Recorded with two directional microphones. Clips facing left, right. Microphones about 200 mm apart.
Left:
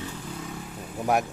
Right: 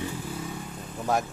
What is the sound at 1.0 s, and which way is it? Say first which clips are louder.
Speech: left 2 dB; 15° left (ahead or behind).